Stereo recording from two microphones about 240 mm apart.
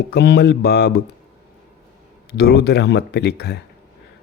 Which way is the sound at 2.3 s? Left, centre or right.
Left.